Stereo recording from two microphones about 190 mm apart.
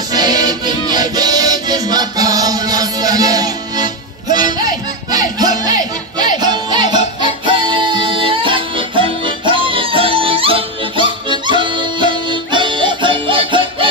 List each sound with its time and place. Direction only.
0.1 s music: 20° right (ahead or behind)